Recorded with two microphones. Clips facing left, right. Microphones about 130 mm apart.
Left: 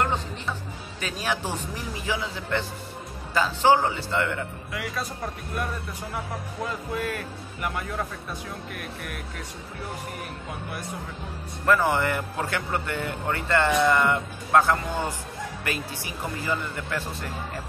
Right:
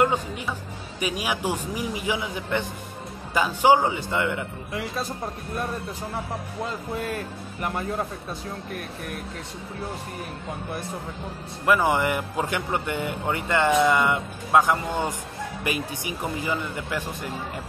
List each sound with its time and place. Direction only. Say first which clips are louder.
1.0 s speech: right 3 dB; 15° right (ahead or behind)
11.6 s speech: right 1 dB; 15° right (ahead or behind)